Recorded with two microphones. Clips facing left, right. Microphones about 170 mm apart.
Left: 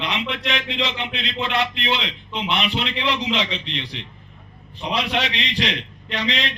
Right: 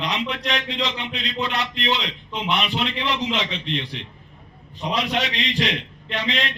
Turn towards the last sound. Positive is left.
turn(degrees=-50)  # may be behind; listen again after turning